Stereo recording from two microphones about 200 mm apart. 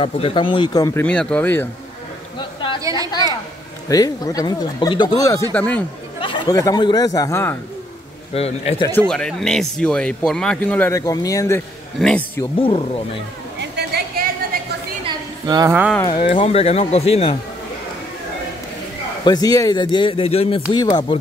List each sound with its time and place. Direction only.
0.0 s speech: 25° left (ahead or behind)
1.0 s speech: 5° left (ahead or behind)
2.3 s a sound: 25° left (ahead or behind)
3.1 s speech: 20° left (ahead or behind)
5.5 s speech: 5° left (ahead or behind)
6.2 s speech: 25° left (ahead or behind)
8.4 s speech: 30° left (ahead or behind)
9.1 s speech: 5° left (ahead or behind)
12.0 s speech: 5° left (ahead or behind)
12.5 s speech: 30° left (ahead or behind)
13.6 s a sound: 55° right (ahead or behind)
15.0 s a sound: 20° right (ahead or behind)
16.1 s speech: 25° left (ahead or behind)
19.2 s speech: 20° left (ahead or behind)